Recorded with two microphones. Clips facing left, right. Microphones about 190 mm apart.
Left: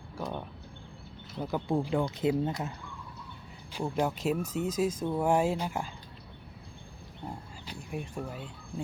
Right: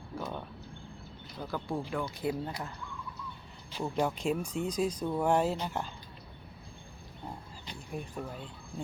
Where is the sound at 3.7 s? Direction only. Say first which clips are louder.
Left 1 dB; 10° left (ahead or behind).